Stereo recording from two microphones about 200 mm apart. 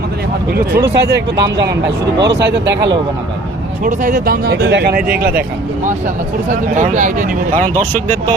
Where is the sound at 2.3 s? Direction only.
55° right (ahead or behind).